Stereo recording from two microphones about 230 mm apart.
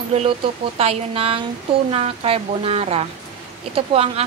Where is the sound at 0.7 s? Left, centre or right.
Right.